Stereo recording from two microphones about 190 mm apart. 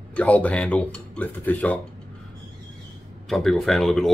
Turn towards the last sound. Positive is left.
turn(degrees=0)  # may be behind; listen again after turning